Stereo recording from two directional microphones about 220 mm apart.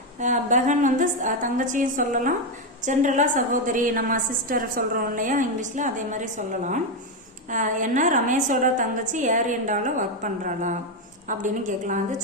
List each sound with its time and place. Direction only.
0.2 s a woman's voice: 35° right (ahead or behind)